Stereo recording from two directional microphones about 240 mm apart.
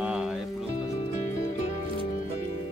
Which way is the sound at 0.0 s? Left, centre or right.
Centre.